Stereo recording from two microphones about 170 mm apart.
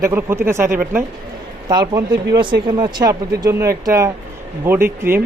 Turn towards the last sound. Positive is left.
turn(degrees=-15)  # may be behind; listen again after turning